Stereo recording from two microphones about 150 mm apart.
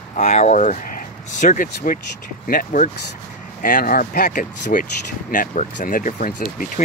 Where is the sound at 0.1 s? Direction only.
50° left (ahead or behind).